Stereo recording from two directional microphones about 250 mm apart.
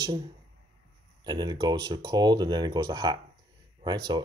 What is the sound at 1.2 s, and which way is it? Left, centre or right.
Speech, centre.